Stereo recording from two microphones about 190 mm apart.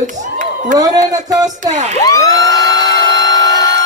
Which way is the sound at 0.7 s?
20° right (ahead or behind).